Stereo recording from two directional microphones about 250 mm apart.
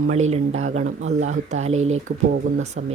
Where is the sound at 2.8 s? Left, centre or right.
Right.